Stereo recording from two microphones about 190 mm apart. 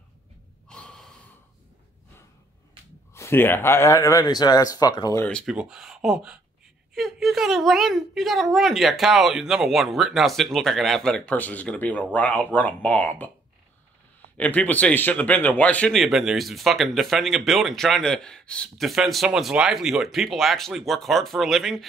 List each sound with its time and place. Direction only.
0.7 s gasp: 5° left (ahead or behind)
3.2 s speech: 10° left (ahead or behind)
5.2 s speech: 5° left (ahead or behind)
14.3 s speech: 10° left (ahead or behind)